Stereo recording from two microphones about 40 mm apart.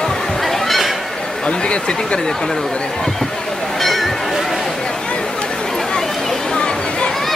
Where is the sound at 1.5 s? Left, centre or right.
Left.